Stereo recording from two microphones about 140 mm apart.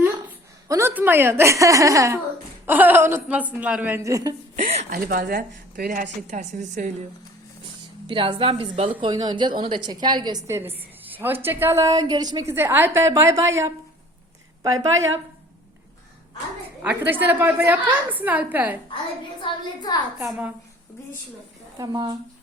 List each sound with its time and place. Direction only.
0.7 s a woman's voice: 15° right (ahead or behind)
4.9 s a woman's voice: 90° right; by 7.1 s 60° right (ahead or behind)
8.0 s a woman's voice: 35° right (ahead or behind)
9.0 s a woman's voice: 30° right (ahead or behind)
10.4 s a woman's voice: 15° right (ahead or behind)
16.8 s a woman's voice: 10° right (ahead or behind)
19.4 s a woman's voice: 30° left (ahead or behind)
21.8 s a woman's voice: 25° right (ahead or behind)